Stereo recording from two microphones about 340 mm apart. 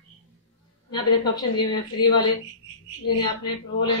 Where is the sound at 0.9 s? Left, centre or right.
Centre.